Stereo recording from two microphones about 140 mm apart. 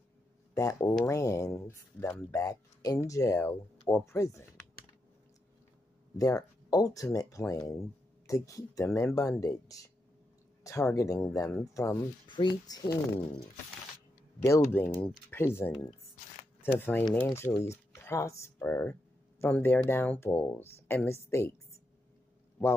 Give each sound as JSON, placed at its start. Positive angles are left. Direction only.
{"t": 0.6, "sound": "speech", "side_deg": 25}
{"t": 6.1, "sound": "speech", "side_deg": 25}
{"t": 12.3, "sound": "speech", "side_deg": 35}
{"t": 15.0, "sound": "speech", "side_deg": 15}